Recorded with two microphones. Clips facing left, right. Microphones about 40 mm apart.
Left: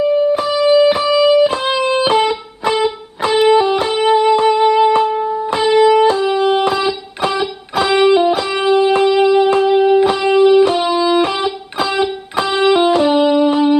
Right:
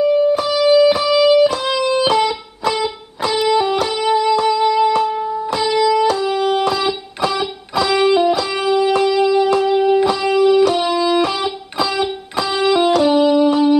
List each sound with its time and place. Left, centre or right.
0.0 s music: centre